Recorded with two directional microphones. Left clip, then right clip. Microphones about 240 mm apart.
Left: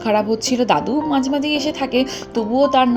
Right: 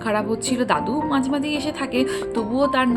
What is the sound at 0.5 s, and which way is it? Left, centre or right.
A woman's voice, centre.